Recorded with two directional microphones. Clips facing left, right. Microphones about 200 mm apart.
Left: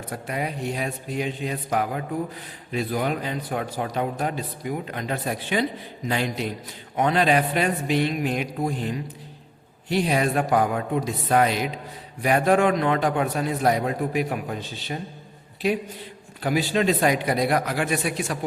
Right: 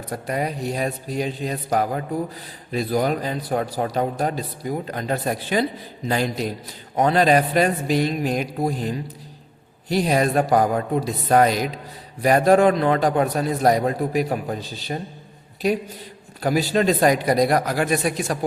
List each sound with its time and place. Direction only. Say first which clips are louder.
0.1 s a man's voice: right 4 dB; 40° right (ahead or behind)
16.4 s a man's voice: right 3 dB; 40° right (ahead or behind)